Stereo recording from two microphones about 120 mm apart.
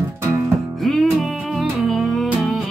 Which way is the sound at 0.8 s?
Centre (ahead or behind).